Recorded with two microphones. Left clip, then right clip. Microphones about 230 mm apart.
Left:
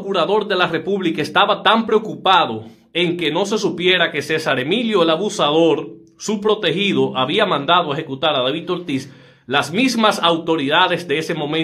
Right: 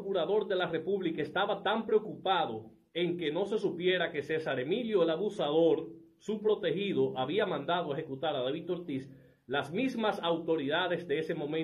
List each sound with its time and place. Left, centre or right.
0.1 s speech: centre